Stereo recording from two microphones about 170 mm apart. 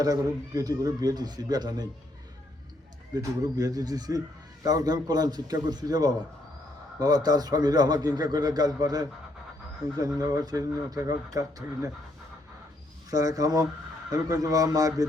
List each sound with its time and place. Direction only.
0.0 s a man's voice: 20° right (ahead or behind)
3.6 s a man's voice: 20° right (ahead or behind)
10.2 s a man's voice: 20° right (ahead or behind)
13.1 s a man's voice: 20° right (ahead or behind)